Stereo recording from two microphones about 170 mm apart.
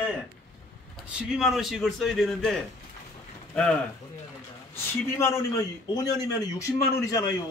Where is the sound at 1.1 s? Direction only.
5° right (ahead or behind).